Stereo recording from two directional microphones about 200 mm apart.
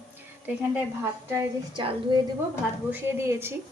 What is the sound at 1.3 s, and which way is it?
Speech, 25° right (ahead or behind).